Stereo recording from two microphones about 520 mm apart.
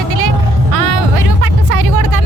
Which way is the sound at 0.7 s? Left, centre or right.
Right.